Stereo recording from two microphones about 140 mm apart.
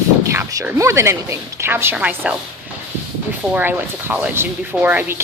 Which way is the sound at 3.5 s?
15° right (ahead or behind).